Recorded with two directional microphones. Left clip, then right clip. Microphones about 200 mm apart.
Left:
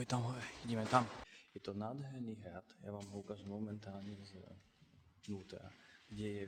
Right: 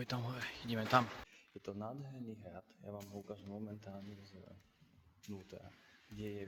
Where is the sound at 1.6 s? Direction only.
25° left (ahead or behind).